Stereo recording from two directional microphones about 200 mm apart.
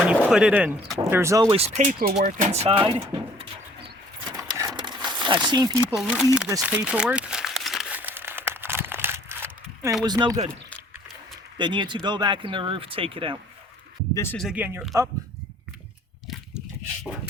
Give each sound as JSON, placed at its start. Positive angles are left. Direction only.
{"t": 0.0, "sound": "speech", "side_deg": -5}
{"t": 1.5, "sound": "speech", "side_deg": -35}
{"t": 4.4, "sound": "a sound", "side_deg": -15}
{"t": 5.9, "sound": "speech", "side_deg": 0}
{"t": 6.6, "sound": "crumpling", "side_deg": -5}
{"t": 10.0, "sound": "speech", "side_deg": -20}
{"t": 10.5, "sound": "a sound", "side_deg": 5}
{"t": 11.5, "sound": "speech", "side_deg": -25}
{"t": 14.3, "sound": "speech", "side_deg": -5}